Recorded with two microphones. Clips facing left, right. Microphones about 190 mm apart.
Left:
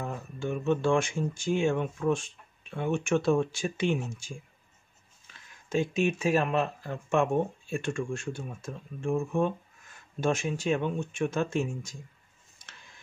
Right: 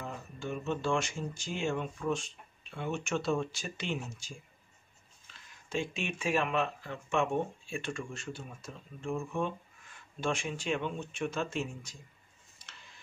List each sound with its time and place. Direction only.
0.0 s speech: 50° left (ahead or behind)
5.7 s speech: 45° left (ahead or behind)